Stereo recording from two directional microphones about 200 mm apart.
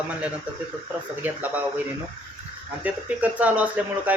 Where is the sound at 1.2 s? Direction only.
10° right (ahead or behind).